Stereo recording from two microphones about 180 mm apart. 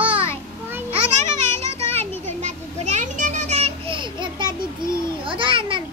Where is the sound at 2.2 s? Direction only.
40° right (ahead or behind).